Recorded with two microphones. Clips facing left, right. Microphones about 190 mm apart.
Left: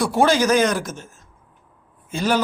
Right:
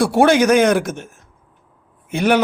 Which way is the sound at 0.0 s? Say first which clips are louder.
Right 4 dB; 60° right (ahead or behind).